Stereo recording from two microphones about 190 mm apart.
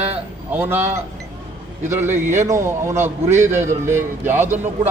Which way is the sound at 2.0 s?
10° right (ahead or behind).